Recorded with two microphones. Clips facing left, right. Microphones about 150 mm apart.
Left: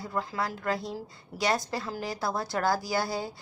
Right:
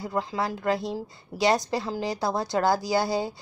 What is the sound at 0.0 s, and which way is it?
A woman's voice, 20° right (ahead or behind).